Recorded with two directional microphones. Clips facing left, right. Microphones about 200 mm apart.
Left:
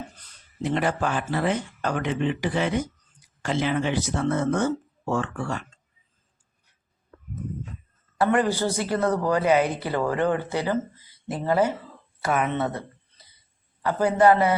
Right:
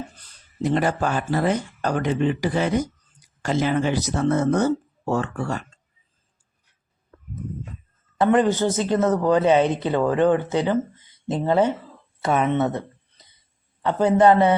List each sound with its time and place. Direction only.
0.6 s speech: 40° right (ahead or behind)
8.2 s speech: 20° right (ahead or behind)
13.8 s speech: 25° right (ahead or behind)